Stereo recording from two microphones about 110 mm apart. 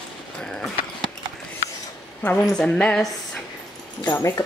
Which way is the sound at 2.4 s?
10° left (ahead or behind).